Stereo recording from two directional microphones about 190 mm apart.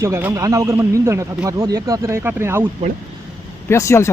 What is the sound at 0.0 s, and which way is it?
A man's voice, 10° right (ahead or behind).